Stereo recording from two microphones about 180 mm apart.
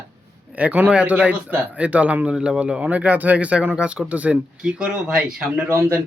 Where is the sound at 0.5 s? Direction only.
10° right (ahead or behind).